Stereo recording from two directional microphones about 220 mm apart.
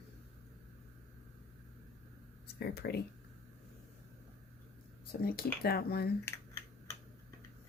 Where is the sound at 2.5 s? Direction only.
45° left (ahead or behind).